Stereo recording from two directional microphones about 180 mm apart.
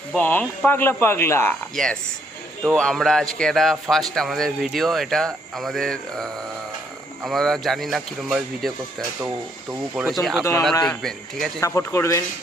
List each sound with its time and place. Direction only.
0.2 s speech: 10° left (ahead or behind)
1.7 s speech: 5° left (ahead or behind)
9.9 s speech: 5° right (ahead or behind)
11.6 s speech: 15° left (ahead or behind)